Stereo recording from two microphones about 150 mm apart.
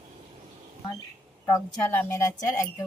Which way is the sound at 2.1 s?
20° left (ahead or behind).